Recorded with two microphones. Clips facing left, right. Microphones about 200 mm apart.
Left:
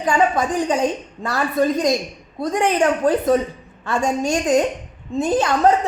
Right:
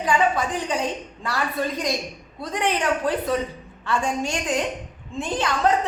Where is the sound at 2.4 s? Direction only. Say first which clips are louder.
Left 6 dB; 45° left (ahead or behind).